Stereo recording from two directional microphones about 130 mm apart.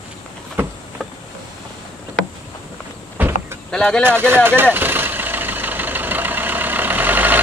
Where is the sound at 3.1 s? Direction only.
20° right (ahead or behind).